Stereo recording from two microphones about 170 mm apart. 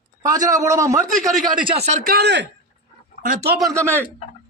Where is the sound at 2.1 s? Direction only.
80° right.